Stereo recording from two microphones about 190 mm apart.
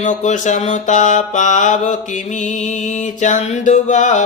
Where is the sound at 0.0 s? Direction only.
40° left (ahead or behind).